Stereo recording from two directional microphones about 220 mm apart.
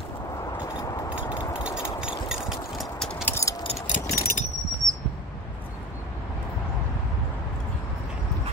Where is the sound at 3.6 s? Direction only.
25° left (ahead or behind).